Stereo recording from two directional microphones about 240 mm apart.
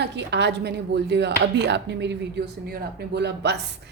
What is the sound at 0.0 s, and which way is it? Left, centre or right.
A woman's voice, right.